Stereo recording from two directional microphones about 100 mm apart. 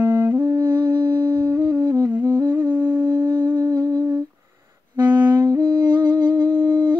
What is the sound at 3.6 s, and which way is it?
Humming, 40° right (ahead or behind).